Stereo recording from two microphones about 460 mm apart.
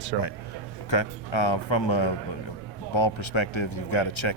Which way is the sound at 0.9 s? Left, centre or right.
Left.